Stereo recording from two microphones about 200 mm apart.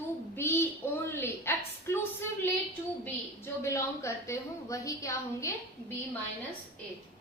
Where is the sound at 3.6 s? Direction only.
15° left (ahead or behind).